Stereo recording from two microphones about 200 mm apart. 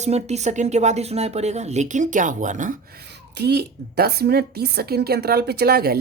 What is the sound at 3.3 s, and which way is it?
A woman's voice, 55° right (ahead or behind).